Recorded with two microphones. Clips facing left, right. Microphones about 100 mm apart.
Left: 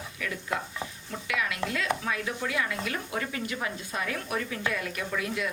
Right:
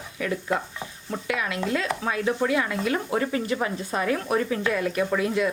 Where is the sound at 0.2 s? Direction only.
35° right (ahead or behind).